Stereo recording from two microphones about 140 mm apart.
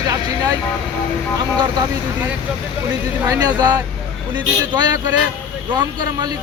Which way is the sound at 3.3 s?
30° right (ahead or behind).